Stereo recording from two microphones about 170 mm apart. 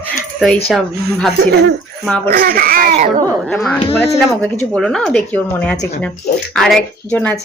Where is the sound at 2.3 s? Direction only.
60° right (ahead or behind).